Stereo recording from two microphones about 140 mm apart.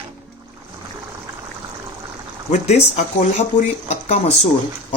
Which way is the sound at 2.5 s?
50° left (ahead or behind).